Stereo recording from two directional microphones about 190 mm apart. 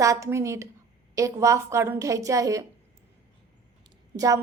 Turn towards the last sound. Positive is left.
turn(degrees=-15)  # may be behind; listen again after turning